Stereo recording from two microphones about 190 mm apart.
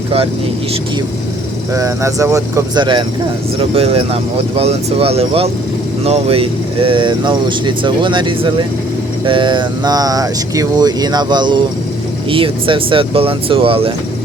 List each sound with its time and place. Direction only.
1.7 s speech: 15° right (ahead or behind)